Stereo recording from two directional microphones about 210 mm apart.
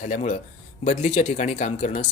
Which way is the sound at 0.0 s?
30° left (ahead or behind).